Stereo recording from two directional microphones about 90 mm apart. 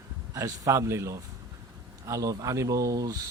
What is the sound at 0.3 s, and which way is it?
Speech, 35° right (ahead or behind).